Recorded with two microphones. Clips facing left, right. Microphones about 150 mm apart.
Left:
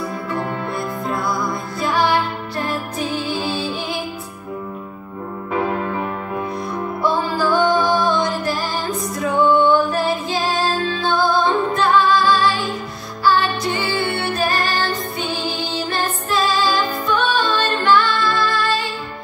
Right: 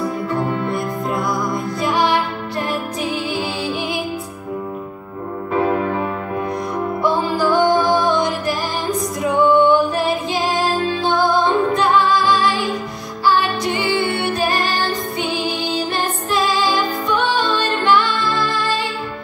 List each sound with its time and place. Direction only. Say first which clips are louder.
0.4 s music: right 3 dB; 15° right (ahead or behind)
7.0 s music: right 1 dB; 15° right (ahead or behind)